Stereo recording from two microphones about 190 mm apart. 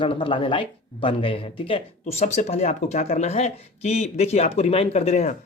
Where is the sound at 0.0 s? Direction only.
25° left (ahead or behind).